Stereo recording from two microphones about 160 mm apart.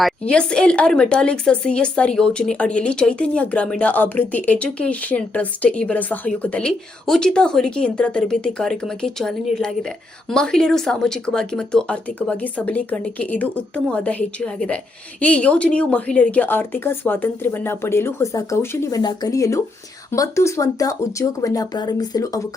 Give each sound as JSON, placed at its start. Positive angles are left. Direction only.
{"t": 0.0, "sound": "speech", "side_deg": 5}